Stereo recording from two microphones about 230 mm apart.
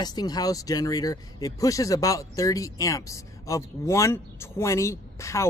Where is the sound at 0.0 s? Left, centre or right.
Centre.